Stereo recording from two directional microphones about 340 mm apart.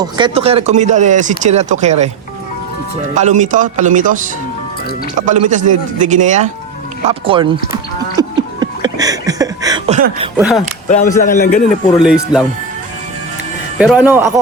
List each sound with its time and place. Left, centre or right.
0.0 s speech: centre
3.2 s speech: right
7.7 s music: centre
10.3 s speech: centre
10.8 s a man's voice: left
11.9 s speech: centre
13.7 s speech: centre